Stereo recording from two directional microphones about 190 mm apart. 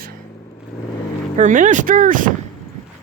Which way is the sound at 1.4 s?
40° right (ahead or behind).